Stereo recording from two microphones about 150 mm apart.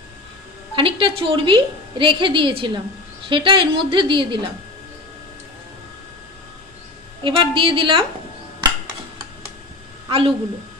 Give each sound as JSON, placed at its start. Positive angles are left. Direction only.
{"t": 0.7, "sound": "a woman's voice", "side_deg": -35}
{"t": 7.2, "sound": "a woman's voice", "side_deg": -35}
{"t": 10.0, "sound": "a woman's voice", "side_deg": -35}